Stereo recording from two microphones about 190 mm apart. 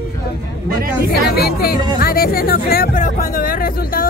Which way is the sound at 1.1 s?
55° left (ahead or behind).